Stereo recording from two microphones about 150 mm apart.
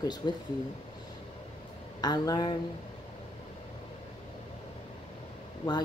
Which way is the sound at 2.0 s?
25° left (ahead or behind).